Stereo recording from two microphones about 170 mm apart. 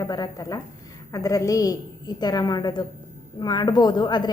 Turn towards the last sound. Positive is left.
turn(degrees=25)  # may be behind; listen again after turning